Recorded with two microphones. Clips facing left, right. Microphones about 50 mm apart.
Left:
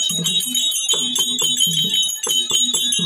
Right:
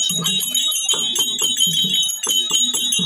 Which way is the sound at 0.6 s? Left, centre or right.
Right.